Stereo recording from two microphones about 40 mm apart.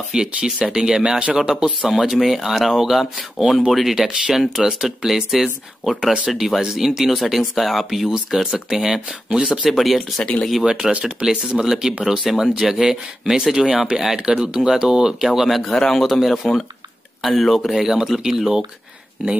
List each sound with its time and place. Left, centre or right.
0.1 s speech: right
9.8 s speech: centre
10.9 s speech: right
11.2 s speech: centre
13.7 s speech: right
13.9 s speech: centre
15.6 s a man's voice: centre
16.0 s speech: centre
17.7 s speech: centre
19.2 s speech: right